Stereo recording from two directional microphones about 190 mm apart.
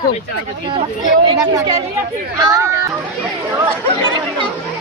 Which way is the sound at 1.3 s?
20° right (ahead or behind).